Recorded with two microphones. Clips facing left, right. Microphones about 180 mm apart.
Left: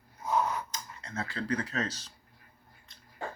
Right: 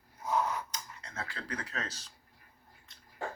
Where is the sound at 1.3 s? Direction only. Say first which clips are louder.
Left 11 dB; 10° right (ahead or behind).